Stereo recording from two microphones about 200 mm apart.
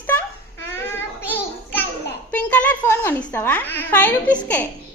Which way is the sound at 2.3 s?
10° left (ahead or behind).